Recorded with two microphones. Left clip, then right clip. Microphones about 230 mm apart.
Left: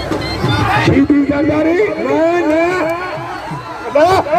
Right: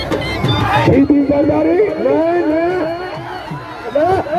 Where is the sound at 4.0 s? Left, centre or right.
Left.